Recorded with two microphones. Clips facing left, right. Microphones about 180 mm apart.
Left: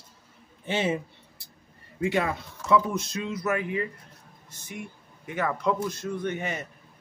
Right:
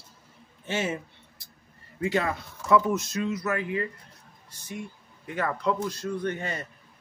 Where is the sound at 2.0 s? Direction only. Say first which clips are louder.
Left 1 dB; 25° left (ahead or behind).